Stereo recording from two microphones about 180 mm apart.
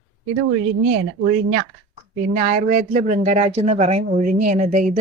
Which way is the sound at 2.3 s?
45° right (ahead or behind).